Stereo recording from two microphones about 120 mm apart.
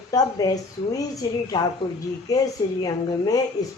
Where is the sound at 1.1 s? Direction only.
35° left (ahead or behind).